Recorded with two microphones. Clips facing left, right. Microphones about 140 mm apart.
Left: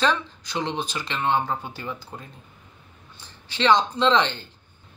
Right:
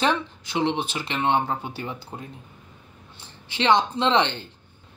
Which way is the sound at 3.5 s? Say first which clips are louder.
Even; 25° right (ahead or behind).